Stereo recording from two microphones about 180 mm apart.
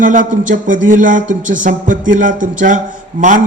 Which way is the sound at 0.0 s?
45° right (ahead or behind).